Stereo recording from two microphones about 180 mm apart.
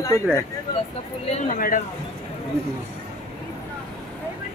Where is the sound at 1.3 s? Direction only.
50° left (ahead or behind).